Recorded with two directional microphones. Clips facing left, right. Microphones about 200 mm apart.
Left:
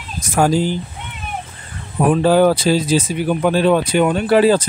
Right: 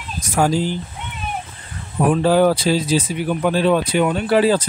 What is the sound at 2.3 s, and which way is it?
Speech, 50° left (ahead or behind).